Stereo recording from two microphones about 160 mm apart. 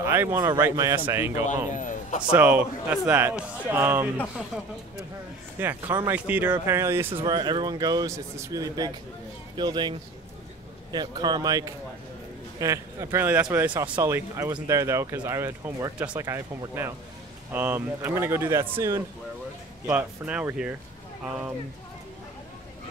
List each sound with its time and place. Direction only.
0.0 s a man's voice: 15° right (ahead or behind)
1.7 s speech: 55° left (ahead or behind)
2.3 s speech: 10° right (ahead or behind)
5.6 s speech: 10° right (ahead or behind)